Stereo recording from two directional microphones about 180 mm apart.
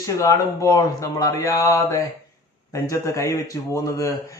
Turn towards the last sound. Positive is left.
turn(degrees=20)  # may be behind; listen again after turning